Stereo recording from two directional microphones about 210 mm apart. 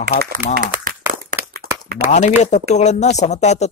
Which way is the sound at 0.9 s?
40° right (ahead or behind).